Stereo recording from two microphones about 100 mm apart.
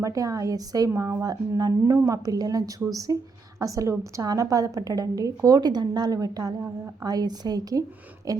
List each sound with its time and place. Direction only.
0.0 s a woman's voice: 35° right (ahead or behind)